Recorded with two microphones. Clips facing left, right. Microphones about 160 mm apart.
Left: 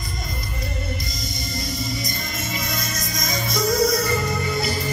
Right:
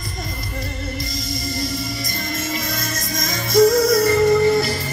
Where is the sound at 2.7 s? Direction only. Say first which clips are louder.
Right 3 dB; 50° right (ahead or behind).